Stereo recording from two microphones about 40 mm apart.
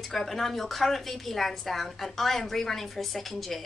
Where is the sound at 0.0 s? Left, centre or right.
Centre.